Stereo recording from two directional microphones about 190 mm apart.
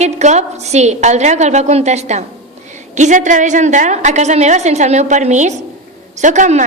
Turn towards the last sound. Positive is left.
turn(degrees=-40)  # may be behind; listen again after turning